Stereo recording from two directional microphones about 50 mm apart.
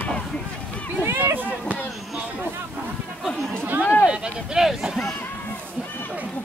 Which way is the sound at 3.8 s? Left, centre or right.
Left.